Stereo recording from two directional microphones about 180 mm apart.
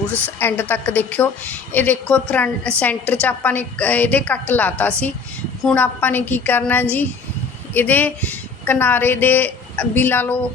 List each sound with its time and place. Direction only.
0.1 s a woman's voice: 10° left (ahead or behind)